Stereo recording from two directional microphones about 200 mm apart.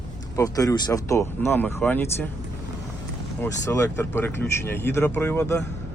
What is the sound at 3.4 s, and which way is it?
Speech, 15° left (ahead or behind).